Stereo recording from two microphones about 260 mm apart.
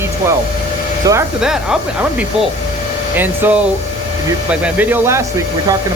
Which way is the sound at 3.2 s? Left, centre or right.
Centre.